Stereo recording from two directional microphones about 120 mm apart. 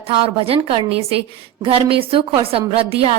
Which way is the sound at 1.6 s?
50° right (ahead or behind).